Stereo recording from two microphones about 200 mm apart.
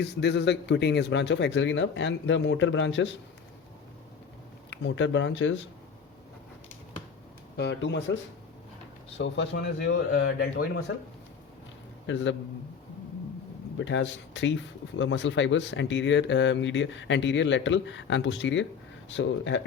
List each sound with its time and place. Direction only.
0.0 s a man's voice: 60° left (ahead or behind)
4.7 s speech: 65° left (ahead or behind)
7.5 s a man's voice: 60° left (ahead or behind)
9.1 s a man's voice: 60° left (ahead or behind)
12.0 s speech: 65° left (ahead or behind)
13.7 s speech: 70° left (ahead or behind)